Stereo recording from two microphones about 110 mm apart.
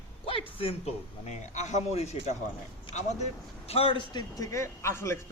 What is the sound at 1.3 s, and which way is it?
A man's voice, 90° left.